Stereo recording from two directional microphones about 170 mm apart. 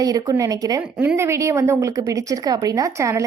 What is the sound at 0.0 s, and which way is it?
A woman's voice, 20° right (ahead or behind).